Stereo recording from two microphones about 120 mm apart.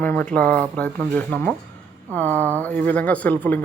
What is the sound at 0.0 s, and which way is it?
A man's voice, 15° left (ahead or behind).